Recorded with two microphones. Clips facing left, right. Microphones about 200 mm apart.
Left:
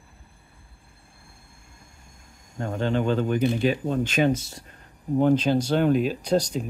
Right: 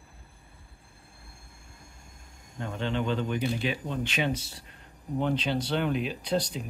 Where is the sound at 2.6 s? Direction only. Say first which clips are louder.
Left 6 dB; 45° left (ahead or behind).